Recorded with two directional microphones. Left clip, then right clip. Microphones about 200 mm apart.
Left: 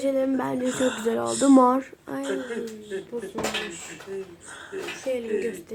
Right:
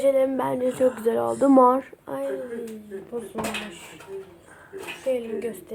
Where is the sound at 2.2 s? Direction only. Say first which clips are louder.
Left 2 dB; 45° left (ahead or behind).